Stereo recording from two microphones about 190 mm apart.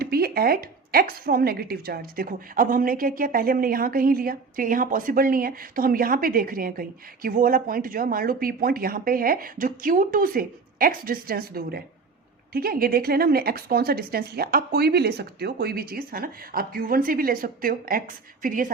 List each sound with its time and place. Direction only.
0.0 s a woman's voice: 55° right (ahead or behind)